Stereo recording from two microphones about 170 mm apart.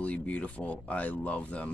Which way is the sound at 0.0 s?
5° left (ahead or behind).